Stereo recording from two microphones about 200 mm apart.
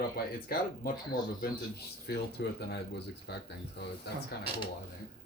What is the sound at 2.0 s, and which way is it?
Speech, 55° left (ahead or behind).